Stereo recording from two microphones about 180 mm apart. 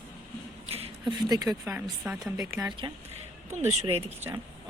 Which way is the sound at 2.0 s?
5° right (ahead or behind).